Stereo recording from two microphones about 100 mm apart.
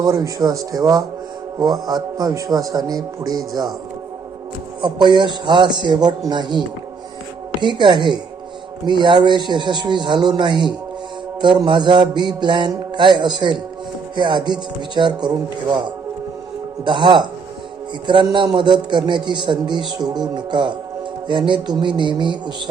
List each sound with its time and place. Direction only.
0.0 s a man's voice: 40° right (ahead or behind)
4.8 s mantra: 50° right (ahead or behind)
16.8 s mantra: 50° right (ahead or behind)